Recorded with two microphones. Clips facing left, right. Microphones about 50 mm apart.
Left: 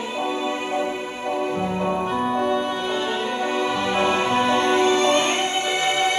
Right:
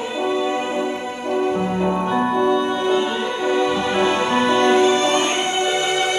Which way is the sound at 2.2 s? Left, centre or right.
Right.